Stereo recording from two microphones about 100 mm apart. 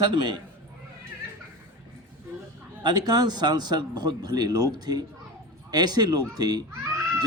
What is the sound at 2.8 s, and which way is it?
A man's voice, 40° right (ahead or behind).